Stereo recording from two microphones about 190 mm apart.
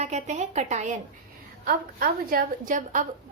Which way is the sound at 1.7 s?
50° right (ahead or behind).